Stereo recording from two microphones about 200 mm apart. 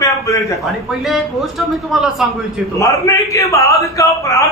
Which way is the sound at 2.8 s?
15° left (ahead or behind).